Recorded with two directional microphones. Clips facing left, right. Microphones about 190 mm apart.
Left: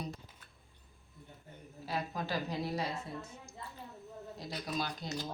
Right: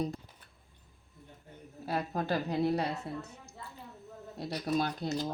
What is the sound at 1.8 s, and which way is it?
A woman's voice, 55° right (ahead or behind).